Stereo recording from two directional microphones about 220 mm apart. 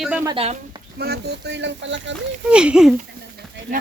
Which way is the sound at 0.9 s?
45° right (ahead or behind).